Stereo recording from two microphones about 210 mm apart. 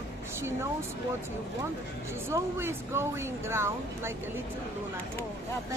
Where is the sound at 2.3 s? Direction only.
10° right (ahead or behind).